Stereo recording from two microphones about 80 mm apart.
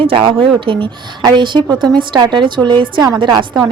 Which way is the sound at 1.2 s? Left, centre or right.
Right.